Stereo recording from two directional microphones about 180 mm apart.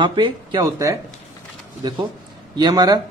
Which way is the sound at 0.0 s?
25° right (ahead or behind).